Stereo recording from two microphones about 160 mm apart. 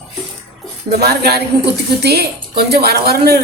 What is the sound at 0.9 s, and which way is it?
A woman's voice, 85° right.